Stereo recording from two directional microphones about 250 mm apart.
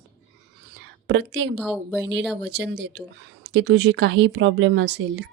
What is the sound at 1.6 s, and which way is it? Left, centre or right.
Speech, centre.